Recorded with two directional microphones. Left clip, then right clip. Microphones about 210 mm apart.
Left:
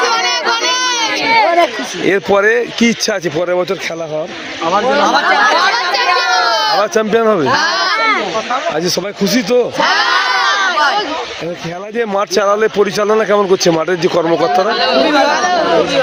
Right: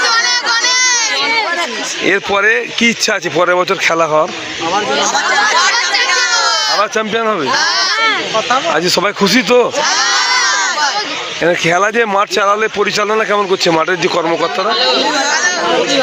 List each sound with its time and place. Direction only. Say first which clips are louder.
0.1 s a sound: right 1 dB; 60° left (ahead or behind)
2.0 s a man's voice: left 1 dB; 15° left (ahead or behind)
3.3 s speech: right 3 dB; 5° left (ahead or behind)
4.9 s chatter: left 2 dB; 15° left (ahead or behind)
6.7 s a man's voice: left 2 dB; 10° left (ahead or behind)
7.5 s bleat: even; 25° left (ahead or behind)
9.2 s speech: right 1 dB; centre (ahead or behind)
9.8 s speech: left 1 dB; 20° left (ahead or behind)
10.5 s a sound: left 2 dB; 20° left (ahead or behind)
11.9 s a man's voice: right 2 dB; 10° left (ahead or behind)